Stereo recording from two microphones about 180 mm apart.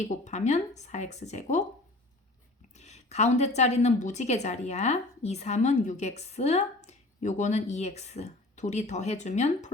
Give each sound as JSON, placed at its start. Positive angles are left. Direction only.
{"t": 0.0, "sound": "a woman's voice", "side_deg": 40}
{"t": 2.7, "sound": "a woman's voice", "side_deg": 40}